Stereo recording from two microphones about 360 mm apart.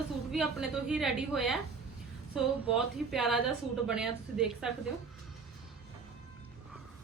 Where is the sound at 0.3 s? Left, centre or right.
Centre.